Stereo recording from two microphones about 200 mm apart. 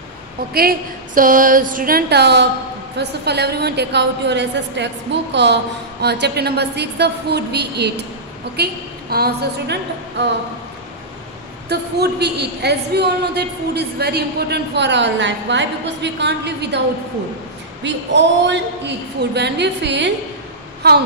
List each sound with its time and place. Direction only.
0.5 s a woman's voice: 50° right (ahead or behind)
11.7 s a woman's voice: 55° right (ahead or behind)
17.8 s a woman's voice: 60° right (ahead or behind)